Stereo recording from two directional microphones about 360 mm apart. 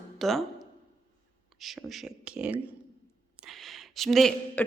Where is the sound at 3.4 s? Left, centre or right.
Centre.